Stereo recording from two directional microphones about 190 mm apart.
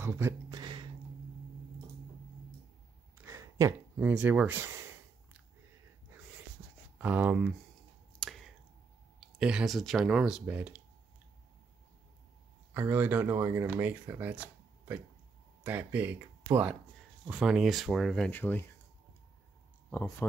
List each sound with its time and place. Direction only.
0.0 s a sound: 15° right (ahead or behind)
3.2 s speech: 15° right (ahead or behind)
7.0 s speech: 10° right (ahead or behind)
8.2 s a sound: centre (ahead or behind)
9.2 s speech: 5° right (ahead or behind)
12.7 s speech: 10° right (ahead or behind)
17.3 s speech: 5° right (ahead or behind)
19.9 s speech: 15° left (ahead or behind)